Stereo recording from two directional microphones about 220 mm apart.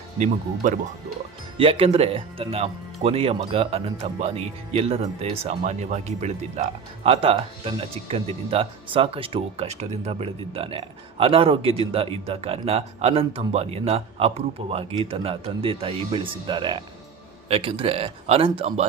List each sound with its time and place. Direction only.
0.2 s speech: 35° right (ahead or behind)